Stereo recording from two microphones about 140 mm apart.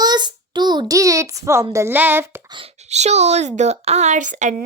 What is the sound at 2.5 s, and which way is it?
Speech, 40° right (ahead or behind).